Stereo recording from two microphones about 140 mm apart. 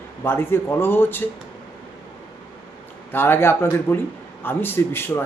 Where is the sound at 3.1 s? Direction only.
15° left (ahead or behind).